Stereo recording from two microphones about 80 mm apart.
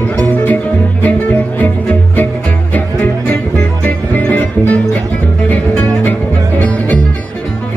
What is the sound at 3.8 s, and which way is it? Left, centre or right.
Music, centre.